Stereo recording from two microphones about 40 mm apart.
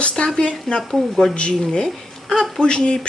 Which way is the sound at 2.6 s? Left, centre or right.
Left.